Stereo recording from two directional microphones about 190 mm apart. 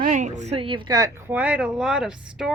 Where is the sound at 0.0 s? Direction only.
40° right (ahead or behind); by 1.1 s 20° right (ahead or behind).